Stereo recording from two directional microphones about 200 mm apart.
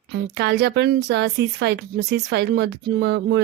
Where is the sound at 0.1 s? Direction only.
55° right (ahead or behind).